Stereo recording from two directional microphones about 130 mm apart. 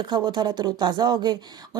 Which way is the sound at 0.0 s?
35° right (ahead or behind).